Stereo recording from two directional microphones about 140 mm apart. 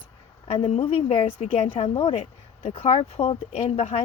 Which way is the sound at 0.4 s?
45° left (ahead or behind).